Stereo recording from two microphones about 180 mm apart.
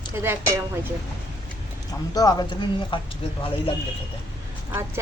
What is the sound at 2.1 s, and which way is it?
Speech, 20° left (ahead or behind).